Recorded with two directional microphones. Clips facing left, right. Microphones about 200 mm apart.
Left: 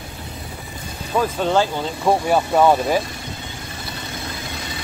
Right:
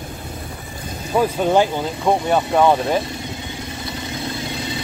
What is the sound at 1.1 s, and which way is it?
Speech, 15° right (ahead or behind).